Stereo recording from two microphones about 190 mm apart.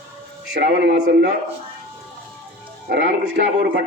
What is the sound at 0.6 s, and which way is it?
Speech, 60° right (ahead or behind).